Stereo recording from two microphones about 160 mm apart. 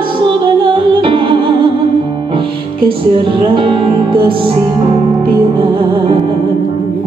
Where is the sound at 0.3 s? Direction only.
30° right (ahead or behind).